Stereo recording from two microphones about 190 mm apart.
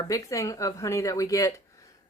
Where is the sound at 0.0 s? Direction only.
15° left (ahead or behind).